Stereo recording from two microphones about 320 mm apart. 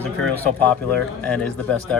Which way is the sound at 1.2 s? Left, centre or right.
Centre.